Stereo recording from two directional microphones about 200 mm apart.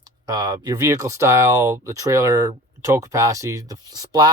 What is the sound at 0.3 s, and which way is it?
Speech, 20° right (ahead or behind).